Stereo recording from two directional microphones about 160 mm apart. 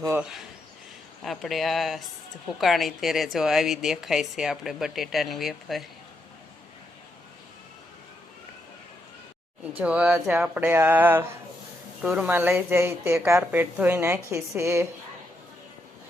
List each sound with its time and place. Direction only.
0.2 s speech: 5° right (ahead or behind)
9.8 s a woman's voice: 5° right (ahead or behind)